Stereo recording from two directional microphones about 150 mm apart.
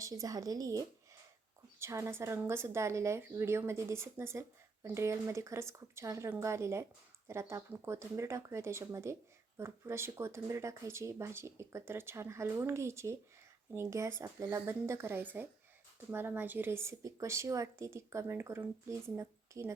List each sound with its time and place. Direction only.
0.0 s a woman's voice: 25° right (ahead or behind)